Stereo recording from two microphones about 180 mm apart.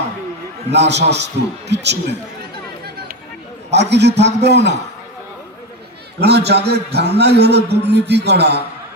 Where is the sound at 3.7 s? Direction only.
70° right (ahead or behind).